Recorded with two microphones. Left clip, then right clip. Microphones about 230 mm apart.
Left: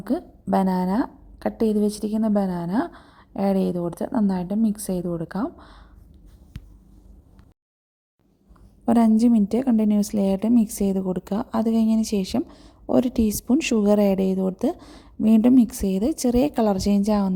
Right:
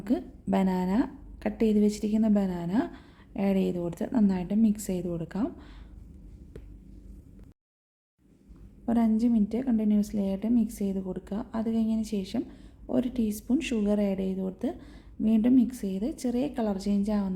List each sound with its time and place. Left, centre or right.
0.0 s a woman's voice: centre
8.9 s a woman's voice: left